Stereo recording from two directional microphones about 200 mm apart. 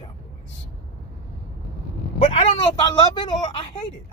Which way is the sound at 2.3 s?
25° left (ahead or behind).